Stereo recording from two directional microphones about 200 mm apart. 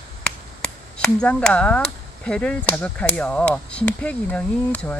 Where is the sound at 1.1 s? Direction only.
5° left (ahead or behind).